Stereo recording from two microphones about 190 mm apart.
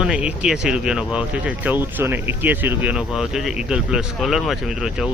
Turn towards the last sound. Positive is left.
turn(degrees=-5)  # may be behind; listen again after turning